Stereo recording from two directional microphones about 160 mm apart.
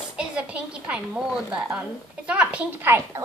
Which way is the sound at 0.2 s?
5° right (ahead or behind).